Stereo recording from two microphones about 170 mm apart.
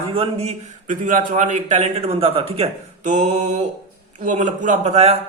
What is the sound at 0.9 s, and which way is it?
A man's voice, 50° right (ahead or behind).